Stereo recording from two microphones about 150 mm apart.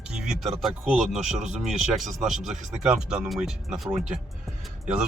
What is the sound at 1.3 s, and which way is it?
Speech, 50° right (ahead or behind).